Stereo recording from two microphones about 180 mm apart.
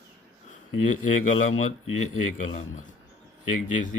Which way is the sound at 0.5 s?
45° left (ahead or behind).